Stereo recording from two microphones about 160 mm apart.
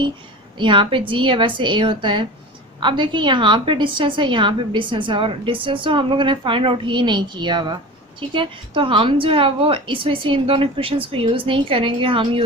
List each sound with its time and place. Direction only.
0.6 s a woman's voice: 30° right (ahead or behind)